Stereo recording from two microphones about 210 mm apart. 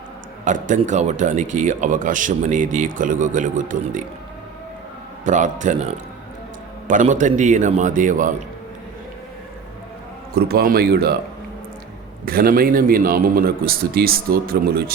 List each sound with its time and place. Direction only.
0.4 s speech: 35° right (ahead or behind)
5.2 s speech: 35° right (ahead or behind)
10.3 s a man's voice: 45° right (ahead or behind)
12.2 s a man's voice: 45° right (ahead or behind)